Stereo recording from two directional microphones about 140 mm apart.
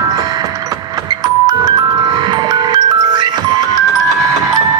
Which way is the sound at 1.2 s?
30° right (ahead or behind).